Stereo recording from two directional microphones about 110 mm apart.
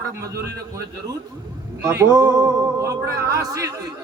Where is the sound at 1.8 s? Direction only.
25° right (ahead or behind).